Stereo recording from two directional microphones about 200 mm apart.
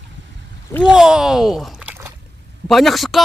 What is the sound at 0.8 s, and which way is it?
Speech, 5° right (ahead or behind).